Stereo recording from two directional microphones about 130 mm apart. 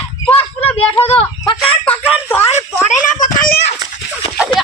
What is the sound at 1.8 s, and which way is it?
Speech, 15° left (ahead or behind).